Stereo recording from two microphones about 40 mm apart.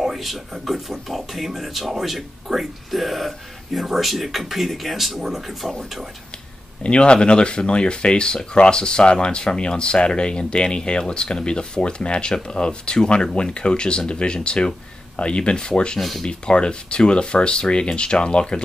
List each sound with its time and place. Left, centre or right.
0.0 s speech: centre
6.8 s speech: left
16.0 s speech: centre
16.3 s speech: left